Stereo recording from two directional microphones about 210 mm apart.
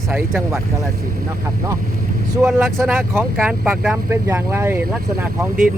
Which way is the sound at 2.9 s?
10° right (ahead or behind).